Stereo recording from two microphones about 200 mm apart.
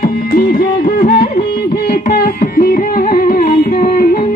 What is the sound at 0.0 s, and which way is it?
Music, 45° left (ahead or behind).